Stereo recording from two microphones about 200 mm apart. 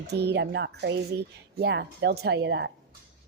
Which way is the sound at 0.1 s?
55° right (ahead or behind).